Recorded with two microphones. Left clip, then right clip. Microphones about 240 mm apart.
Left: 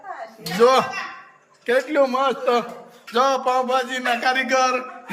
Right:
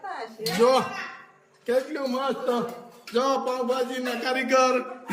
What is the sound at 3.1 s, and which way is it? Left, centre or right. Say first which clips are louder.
A man's voice: left 6 dB; centre.